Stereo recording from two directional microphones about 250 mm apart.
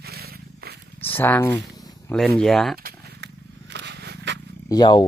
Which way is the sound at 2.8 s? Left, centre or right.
Right.